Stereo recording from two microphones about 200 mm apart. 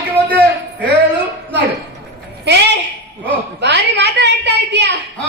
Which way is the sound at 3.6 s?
55° right (ahead or behind).